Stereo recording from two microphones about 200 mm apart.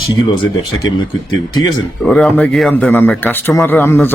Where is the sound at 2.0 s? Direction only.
Centre (ahead or behind).